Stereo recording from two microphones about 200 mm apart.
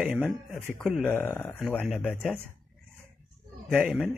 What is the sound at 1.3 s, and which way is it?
A man's voice, 10° left (ahead or behind).